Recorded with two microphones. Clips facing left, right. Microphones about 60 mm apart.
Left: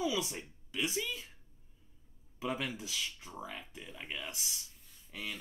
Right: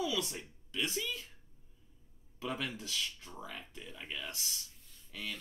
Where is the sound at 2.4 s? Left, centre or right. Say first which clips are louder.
Left 2 dB; centre.